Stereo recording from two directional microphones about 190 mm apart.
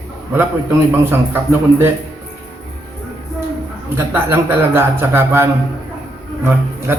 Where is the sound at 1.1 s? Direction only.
10° right (ahead or behind).